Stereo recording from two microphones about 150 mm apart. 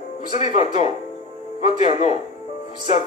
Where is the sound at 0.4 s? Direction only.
50° left (ahead or behind).